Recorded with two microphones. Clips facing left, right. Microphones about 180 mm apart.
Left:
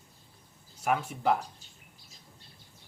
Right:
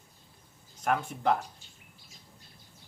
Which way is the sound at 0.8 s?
5° left (ahead or behind).